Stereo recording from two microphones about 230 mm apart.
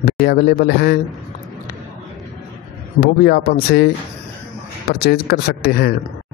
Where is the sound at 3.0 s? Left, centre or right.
Left.